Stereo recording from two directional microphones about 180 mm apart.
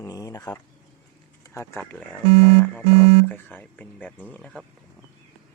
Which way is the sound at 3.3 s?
10° left (ahead or behind).